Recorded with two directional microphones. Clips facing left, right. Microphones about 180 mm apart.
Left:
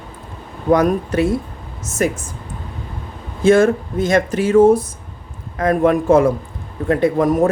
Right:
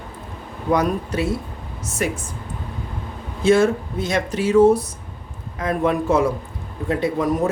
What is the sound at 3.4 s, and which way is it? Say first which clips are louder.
Speech: left 4 dB; 50° left (ahead or behind).